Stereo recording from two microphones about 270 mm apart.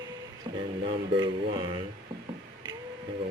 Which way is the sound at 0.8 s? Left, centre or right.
Centre.